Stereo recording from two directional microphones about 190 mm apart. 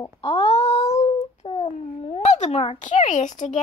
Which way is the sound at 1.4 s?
35° left (ahead or behind).